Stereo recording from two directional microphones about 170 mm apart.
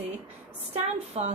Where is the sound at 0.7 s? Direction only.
40° right (ahead or behind).